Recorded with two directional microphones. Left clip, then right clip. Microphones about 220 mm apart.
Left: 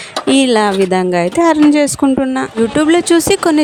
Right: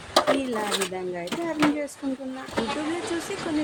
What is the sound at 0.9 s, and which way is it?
Speech, 45° left (ahead or behind).